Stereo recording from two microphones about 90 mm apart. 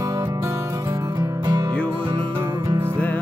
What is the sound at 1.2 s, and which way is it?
Music, 50° right (ahead or behind).